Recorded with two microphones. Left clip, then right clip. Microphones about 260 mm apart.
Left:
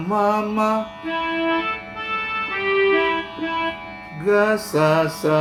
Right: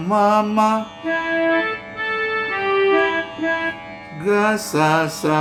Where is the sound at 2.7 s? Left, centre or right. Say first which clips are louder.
Right 1 dB; left.